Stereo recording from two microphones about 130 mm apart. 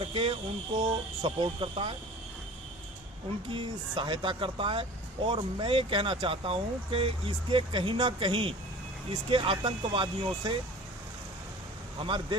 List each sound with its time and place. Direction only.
0.0 s speech: 45° right (ahead or behind)
3.5 s speech: 40° right (ahead or behind)
11.9 s speech: 40° right (ahead or behind)